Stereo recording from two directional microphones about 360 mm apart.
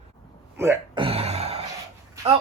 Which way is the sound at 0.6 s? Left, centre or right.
Centre.